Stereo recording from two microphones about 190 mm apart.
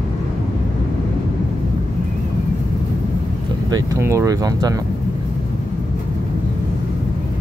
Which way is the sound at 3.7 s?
15° right (ahead or behind).